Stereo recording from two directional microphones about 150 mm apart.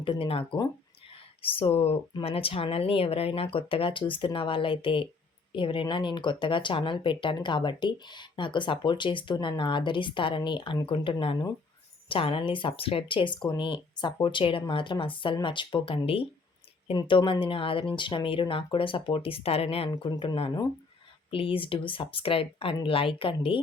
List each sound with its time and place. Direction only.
0.0 s speech: 35° left (ahead or behind)